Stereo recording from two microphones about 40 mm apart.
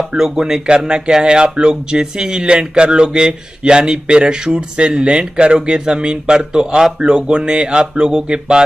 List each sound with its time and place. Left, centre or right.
0.2 s speech: centre